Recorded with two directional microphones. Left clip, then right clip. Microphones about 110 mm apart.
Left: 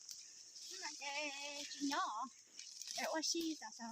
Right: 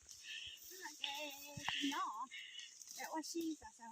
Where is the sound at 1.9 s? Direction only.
25° left (ahead or behind).